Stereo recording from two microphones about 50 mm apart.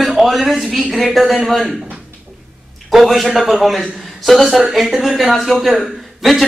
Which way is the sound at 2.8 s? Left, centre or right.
Centre.